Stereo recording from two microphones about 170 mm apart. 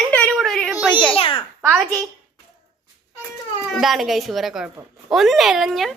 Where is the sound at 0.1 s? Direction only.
10° left (ahead or behind).